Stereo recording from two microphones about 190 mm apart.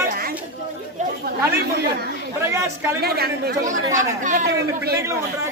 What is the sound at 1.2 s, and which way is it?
Speech, 55° right (ahead or behind).